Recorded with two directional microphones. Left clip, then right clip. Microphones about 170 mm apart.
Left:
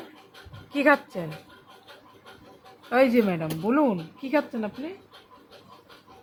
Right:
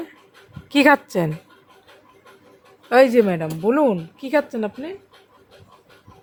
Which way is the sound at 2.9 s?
85° right.